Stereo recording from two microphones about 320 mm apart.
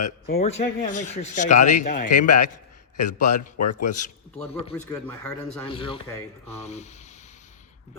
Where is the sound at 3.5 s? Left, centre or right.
Left.